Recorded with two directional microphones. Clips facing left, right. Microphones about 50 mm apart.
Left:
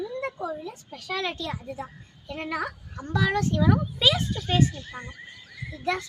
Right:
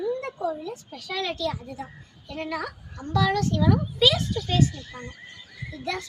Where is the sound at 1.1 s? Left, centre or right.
Left.